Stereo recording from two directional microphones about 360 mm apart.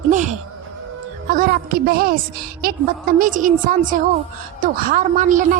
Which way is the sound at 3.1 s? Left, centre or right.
Right.